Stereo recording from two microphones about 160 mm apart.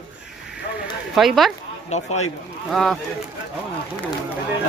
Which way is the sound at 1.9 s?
45° left (ahead or behind).